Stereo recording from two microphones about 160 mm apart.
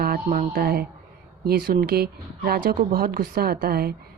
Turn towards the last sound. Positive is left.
turn(degrees=-75)  # may be behind; listen again after turning